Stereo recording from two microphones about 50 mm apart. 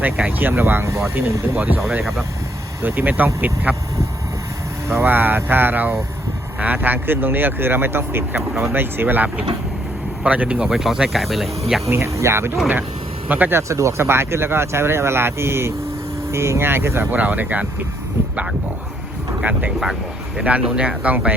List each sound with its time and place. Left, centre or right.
0.3 s speech: right
1.1 s speech: right
2.8 s speech: right
4.9 s speech: right
10.2 s speech: right
10.7 s cricket: centre
11.9 s speech: right
13.2 s speech: right
13.5 s speech: right
17.1 s speech: right
20.4 s speech: right